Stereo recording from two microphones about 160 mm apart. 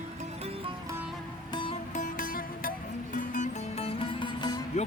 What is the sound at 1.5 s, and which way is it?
Music, 30° left (ahead or behind).